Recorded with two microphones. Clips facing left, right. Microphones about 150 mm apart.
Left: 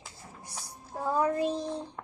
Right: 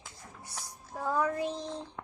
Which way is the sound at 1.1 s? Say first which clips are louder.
Left 3 dB; 30° left (ahead or behind).